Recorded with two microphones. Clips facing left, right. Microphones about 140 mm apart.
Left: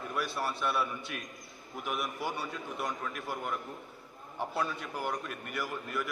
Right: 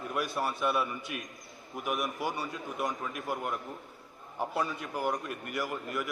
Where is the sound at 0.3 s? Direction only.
15° right (ahead or behind).